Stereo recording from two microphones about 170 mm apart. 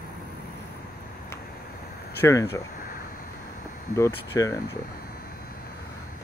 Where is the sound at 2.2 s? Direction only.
15° left (ahead or behind).